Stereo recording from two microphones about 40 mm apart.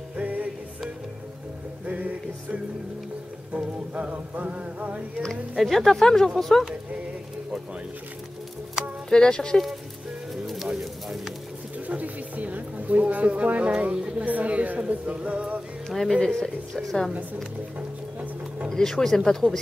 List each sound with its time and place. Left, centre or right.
0.2 s music: right
1.9 s music: right
5.6 s speech: centre
9.1 s speech: centre
10.3 s bird: centre
11.9 s music: right
13.7 s a sound: right
14.8 s music: right
15.9 s speech: centre
17.7 s music: right
18.7 s speech: centre